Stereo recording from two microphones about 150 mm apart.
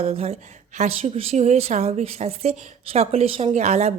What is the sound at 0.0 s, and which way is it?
A woman's voice, 45° right (ahead or behind).